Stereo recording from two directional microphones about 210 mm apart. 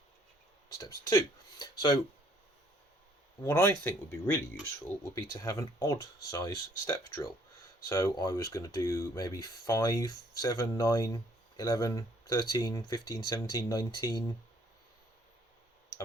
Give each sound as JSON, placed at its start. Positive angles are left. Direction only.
{"t": 0.8, "sound": "speech", "side_deg": 15}
{"t": 3.4, "sound": "speech", "side_deg": 10}